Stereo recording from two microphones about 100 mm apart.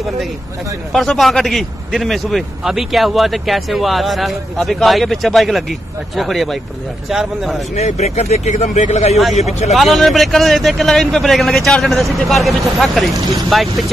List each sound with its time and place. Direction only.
0.9 s speech: centre (ahead or behind)
7.7 s speech: 90° left
9.8 s speech: centre (ahead or behind)